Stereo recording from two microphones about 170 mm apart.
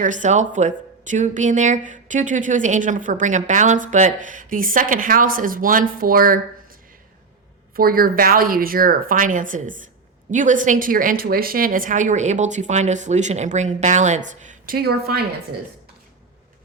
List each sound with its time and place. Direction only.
0.0 s speech: 45° right (ahead or behind)
7.8 s speech: 60° right (ahead or behind)